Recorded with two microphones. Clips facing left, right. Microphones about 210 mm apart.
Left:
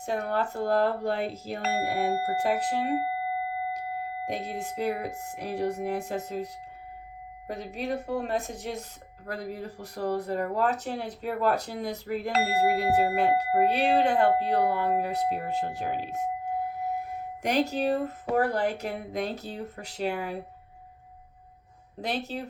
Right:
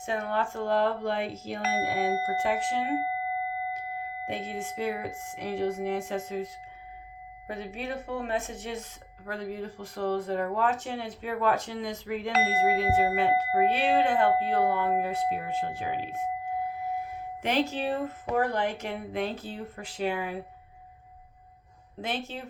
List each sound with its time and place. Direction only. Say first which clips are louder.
0.0 s speech: left 1 dB; 40° left (ahead or behind)
22.0 s speech: left 2 dB; 40° left (ahead or behind)